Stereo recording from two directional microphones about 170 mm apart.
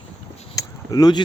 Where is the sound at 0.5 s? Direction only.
20° left (ahead or behind).